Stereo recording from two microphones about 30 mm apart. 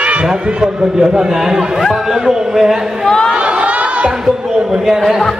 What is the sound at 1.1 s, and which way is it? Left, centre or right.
Speech, centre.